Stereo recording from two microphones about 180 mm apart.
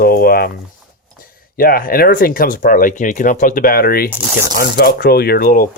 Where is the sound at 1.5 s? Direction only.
55° left (ahead or behind).